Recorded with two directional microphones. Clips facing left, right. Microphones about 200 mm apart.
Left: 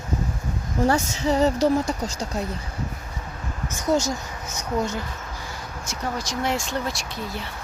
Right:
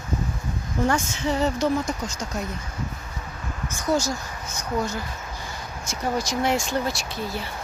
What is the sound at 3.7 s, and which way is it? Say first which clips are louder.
Speech: left 2 dB; 20° left (ahead or behind).